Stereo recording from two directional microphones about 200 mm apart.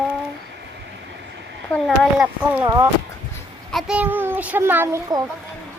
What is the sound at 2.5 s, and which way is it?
Speech, 15° right (ahead or behind).